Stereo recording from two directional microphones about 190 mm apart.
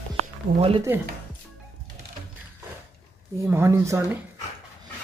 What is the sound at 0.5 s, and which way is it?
Speech, 30° right (ahead or behind).